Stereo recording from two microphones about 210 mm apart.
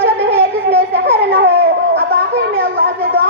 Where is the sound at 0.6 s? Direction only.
50° right (ahead or behind).